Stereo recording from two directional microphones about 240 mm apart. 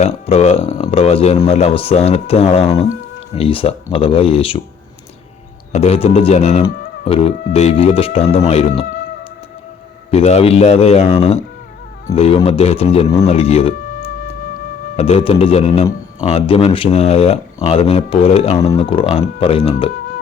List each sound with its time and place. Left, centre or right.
0.0 s a man's voice: left
5.7 s a man's voice: left
10.1 s a man's voice: left
14.9 s a man's voice: left